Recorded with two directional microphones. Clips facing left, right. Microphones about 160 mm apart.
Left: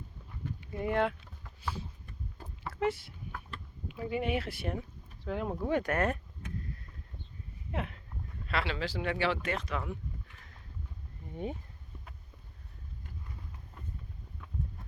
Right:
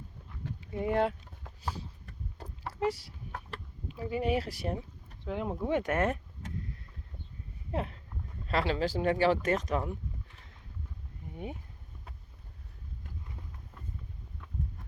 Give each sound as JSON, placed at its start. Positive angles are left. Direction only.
{"t": 0.6, "sound": "a sound", "side_deg": -25}
{"t": 2.8, "sound": "speech", "side_deg": -35}
{"t": 3.9, "sound": "speech", "side_deg": 15}
{"t": 4.2, "sound": "speech", "side_deg": -35}
{"t": 5.2, "sound": "speech", "side_deg": -20}
{"t": 7.7, "sound": "speech", "side_deg": -35}